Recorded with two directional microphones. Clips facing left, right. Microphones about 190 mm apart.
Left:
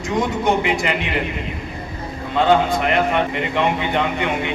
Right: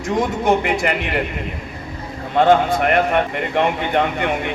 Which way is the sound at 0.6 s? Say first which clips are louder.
Right 1 dB; 50° right (ahead or behind).